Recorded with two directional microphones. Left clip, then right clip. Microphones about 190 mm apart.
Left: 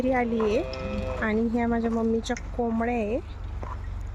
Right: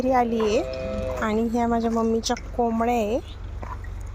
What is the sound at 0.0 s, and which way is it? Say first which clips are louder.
Speech: right 4 dB; 5° left (ahead or behind).